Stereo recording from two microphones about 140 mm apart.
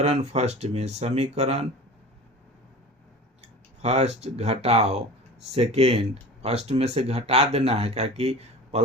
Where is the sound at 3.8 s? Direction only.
50° right (ahead or behind).